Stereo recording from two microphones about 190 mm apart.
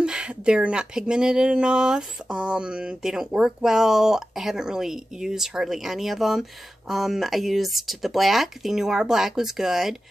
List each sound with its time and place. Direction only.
0.0 s speech: 5° right (ahead or behind)